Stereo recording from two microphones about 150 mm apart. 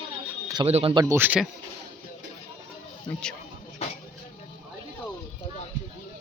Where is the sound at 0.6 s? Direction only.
40° right (ahead or behind).